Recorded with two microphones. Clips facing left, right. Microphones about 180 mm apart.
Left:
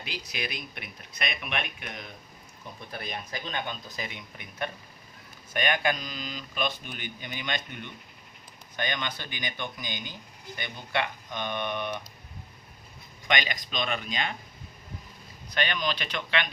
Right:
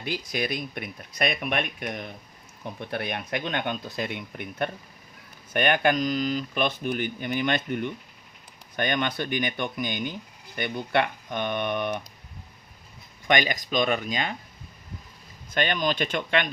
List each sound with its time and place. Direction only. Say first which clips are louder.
0.1 s speech: right 8 dB; 45° right (ahead or behind)
2.9 s speech: right 7 dB; 65° right (ahead or behind)
13.2 s speech: right 6 dB; 45° right (ahead or behind)
15.4 s speech: right 4 dB; 45° right (ahead or behind)